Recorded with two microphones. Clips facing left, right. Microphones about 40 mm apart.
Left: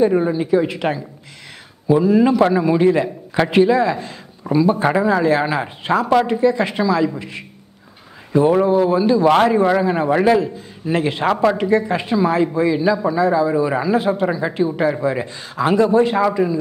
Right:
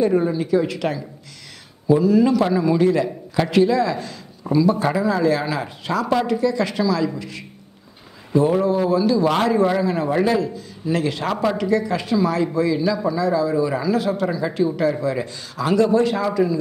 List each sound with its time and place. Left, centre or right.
0.0 s a man's voice: centre